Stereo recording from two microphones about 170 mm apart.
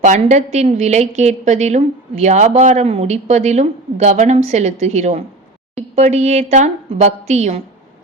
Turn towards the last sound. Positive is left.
turn(degrees=-40)  # may be behind; listen again after turning